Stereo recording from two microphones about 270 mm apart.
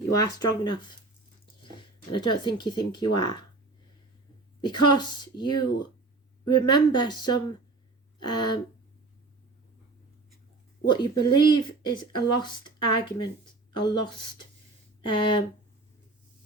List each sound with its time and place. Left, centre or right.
0.3 s speech: centre
4.6 s speech: centre
10.8 s speech: centre